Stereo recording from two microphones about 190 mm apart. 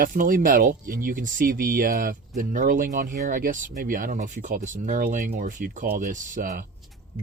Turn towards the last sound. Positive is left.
turn(degrees=-45)  # may be behind; listen again after turning